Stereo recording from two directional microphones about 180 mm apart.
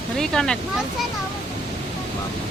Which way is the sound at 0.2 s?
5° left (ahead or behind).